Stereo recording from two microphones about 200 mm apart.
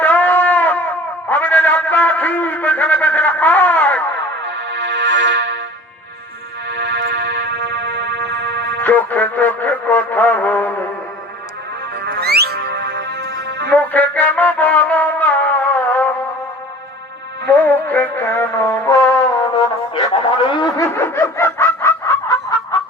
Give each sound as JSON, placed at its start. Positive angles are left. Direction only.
{"t": 0.0, "sound": "shofar", "side_deg": 10}
{"t": 1.3, "sound": "music", "side_deg": 10}
{"t": 4.2, "sound": "music", "side_deg": -60}
{"t": 6.7, "sound": "music", "side_deg": -60}
{"t": 8.8, "sound": "music", "side_deg": 10}
{"t": 12.0, "sound": "music", "side_deg": -55}
{"t": 13.7, "sound": "music", "side_deg": 10}
{"t": 17.6, "sound": "music", "side_deg": 10}
{"t": 18.9, "sound": "brass instrument", "side_deg": 15}
{"t": 20.4, "sound": "snicker", "side_deg": 25}